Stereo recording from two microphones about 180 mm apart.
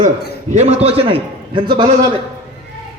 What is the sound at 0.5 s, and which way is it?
A man's voice, 35° right (ahead or behind).